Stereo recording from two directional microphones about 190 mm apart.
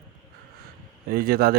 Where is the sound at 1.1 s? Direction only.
50° right (ahead or behind).